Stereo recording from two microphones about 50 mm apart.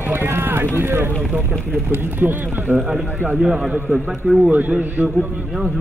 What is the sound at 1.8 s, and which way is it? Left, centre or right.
Speech, right.